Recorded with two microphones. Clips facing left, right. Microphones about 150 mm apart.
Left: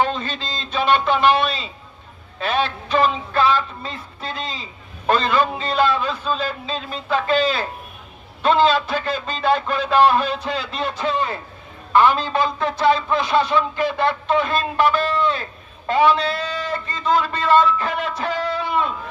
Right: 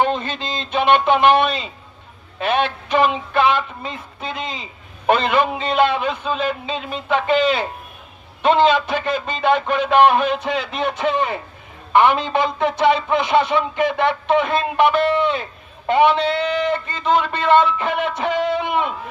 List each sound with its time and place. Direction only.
0.3 s speech: 20° right (ahead or behind)
2.9 s speech: 20° right (ahead or behind)